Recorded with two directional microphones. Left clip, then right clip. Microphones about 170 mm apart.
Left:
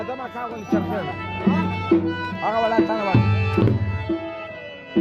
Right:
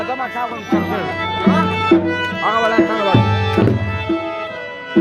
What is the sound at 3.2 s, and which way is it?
Organ, 10° right (ahead or behind).